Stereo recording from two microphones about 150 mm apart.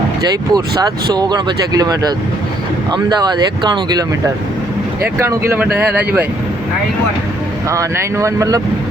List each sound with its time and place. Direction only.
0.5 s speech: 25° right (ahead or behind)
5.2 s speech: 20° right (ahead or behind)
7.7 s speech: 20° right (ahead or behind)